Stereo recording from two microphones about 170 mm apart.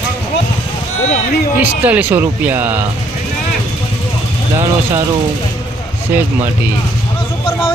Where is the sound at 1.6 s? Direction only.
10° right (ahead or behind).